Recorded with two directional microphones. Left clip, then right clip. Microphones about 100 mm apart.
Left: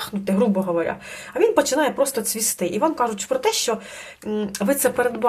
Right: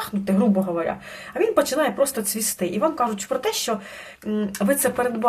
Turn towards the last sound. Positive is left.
turn(degrees=35)  # may be behind; listen again after turning